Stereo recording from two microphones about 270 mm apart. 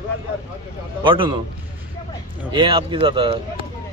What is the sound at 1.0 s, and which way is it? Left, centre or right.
Speech, centre.